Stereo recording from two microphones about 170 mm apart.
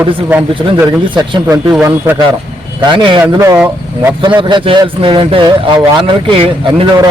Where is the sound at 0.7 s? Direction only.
25° right (ahead or behind).